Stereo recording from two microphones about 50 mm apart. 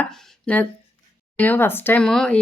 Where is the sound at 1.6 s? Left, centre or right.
Left.